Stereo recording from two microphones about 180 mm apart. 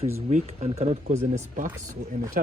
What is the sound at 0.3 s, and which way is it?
Speech, 40° right (ahead or behind).